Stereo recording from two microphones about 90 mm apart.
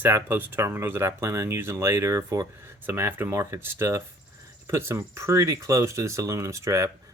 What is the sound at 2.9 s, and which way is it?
Speech, 25° right (ahead or behind).